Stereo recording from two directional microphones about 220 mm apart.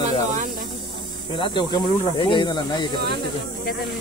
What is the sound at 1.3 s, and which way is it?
Speech, 20° left (ahead or behind).